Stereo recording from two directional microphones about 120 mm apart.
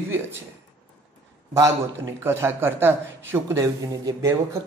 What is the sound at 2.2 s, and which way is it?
A man's voice, 20° right (ahead or behind).